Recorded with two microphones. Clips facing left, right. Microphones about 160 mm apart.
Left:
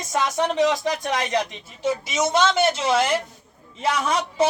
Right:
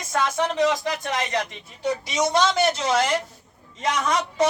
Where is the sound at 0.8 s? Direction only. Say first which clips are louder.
Left 2 dB; 20° left (ahead or behind).